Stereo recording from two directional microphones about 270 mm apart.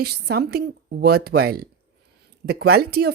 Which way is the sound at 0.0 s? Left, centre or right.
Right.